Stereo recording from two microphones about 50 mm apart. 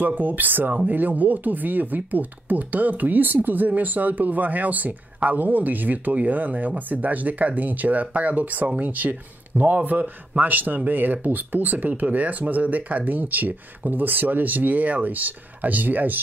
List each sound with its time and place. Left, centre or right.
0.0 s speech: right